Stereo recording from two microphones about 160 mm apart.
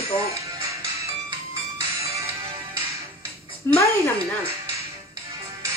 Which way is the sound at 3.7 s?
15° left (ahead or behind).